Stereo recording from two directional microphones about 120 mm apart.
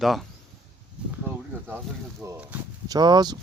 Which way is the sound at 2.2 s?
25° right (ahead or behind).